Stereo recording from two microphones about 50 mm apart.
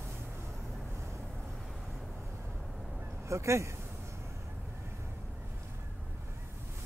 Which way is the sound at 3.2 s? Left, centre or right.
Right.